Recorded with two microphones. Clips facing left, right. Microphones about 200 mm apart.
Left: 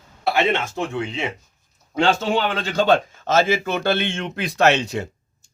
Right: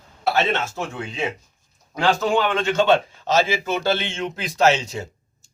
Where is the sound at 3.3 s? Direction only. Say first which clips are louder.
Left 2 dB; 55° left (ahead or behind).